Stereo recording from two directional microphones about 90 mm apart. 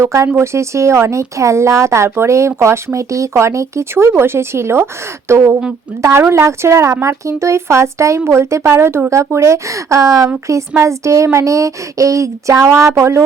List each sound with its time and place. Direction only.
0.0 s a woman's voice: 35° right (ahead or behind)